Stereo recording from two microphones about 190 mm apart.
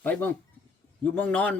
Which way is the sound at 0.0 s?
10° left (ahead or behind).